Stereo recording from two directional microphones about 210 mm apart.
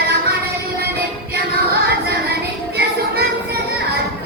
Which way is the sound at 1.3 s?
50° right (ahead or behind).